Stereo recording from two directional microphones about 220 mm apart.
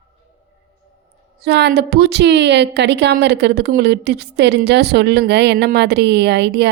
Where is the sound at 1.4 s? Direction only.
50° right (ahead or behind).